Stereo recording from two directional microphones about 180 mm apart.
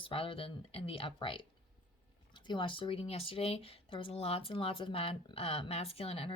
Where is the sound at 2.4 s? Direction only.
25° left (ahead or behind).